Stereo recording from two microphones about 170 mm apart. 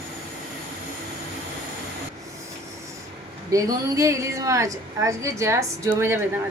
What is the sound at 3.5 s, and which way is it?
A woman's voice, 20° right (ahead or behind).